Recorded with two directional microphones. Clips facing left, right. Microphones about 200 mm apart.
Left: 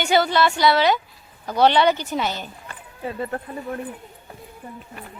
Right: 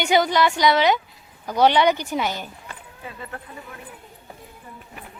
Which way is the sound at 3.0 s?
40° left (ahead or behind).